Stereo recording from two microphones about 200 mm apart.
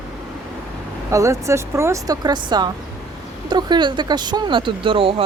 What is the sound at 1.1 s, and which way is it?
Speech, 15° right (ahead or behind).